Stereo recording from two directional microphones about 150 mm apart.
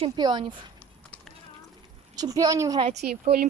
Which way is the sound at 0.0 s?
30° right (ahead or behind).